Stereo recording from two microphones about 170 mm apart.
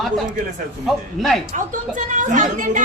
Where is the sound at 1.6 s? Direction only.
45° right (ahead or behind).